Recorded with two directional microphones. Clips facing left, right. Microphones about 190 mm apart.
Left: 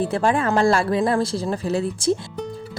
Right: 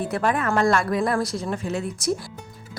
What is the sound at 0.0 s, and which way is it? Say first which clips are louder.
Speech: left 3 dB; 30° left (ahead or behind).